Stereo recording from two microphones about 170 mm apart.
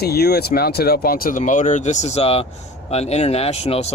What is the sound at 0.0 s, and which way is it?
Speech, 70° left (ahead or behind).